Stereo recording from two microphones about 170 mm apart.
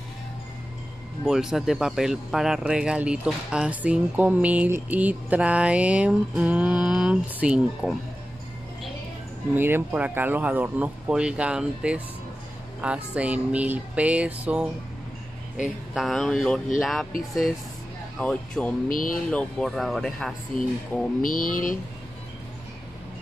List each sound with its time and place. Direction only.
1.2 s speech: 5° right (ahead or behind)
9.6 s speech: 10° right (ahead or behind)
18.2 s speech: 5° left (ahead or behind)
18.9 s speech: 55° left (ahead or behind)
19.3 s speech: centre (ahead or behind)
21.2 s speech: 55° left (ahead or behind)